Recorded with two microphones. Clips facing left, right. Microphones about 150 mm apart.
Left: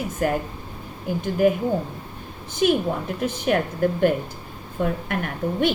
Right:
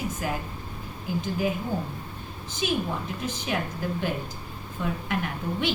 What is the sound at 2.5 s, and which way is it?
A woman's voice, 55° left (ahead or behind).